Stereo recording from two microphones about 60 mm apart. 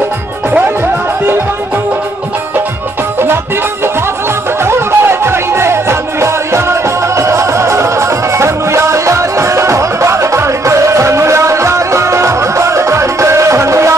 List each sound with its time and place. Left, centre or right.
4.6 s music: right